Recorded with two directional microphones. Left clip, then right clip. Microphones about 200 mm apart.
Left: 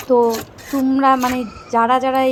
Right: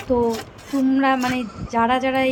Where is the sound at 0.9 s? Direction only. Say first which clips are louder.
Left 5 dB; 20° left (ahead or behind).